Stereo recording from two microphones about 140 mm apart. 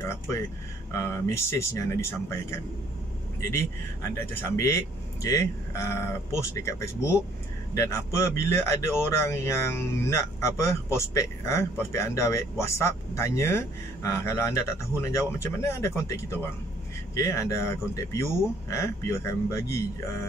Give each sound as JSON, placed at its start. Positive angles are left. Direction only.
{"t": 0.9, "sound": "a man's voice", "side_deg": 20}
{"t": 17.1, "sound": "a man's voice", "side_deg": 20}